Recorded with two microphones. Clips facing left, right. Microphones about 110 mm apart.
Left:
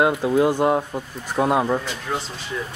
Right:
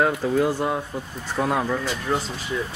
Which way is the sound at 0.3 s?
20° left (ahead or behind).